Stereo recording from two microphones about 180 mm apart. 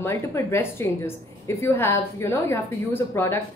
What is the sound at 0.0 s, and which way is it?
A woman's voice, 15° left (ahead or behind).